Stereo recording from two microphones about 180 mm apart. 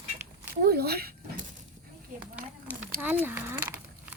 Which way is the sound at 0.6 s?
60° right (ahead or behind).